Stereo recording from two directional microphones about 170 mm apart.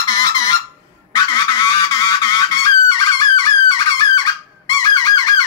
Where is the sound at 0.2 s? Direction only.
20° left (ahead or behind).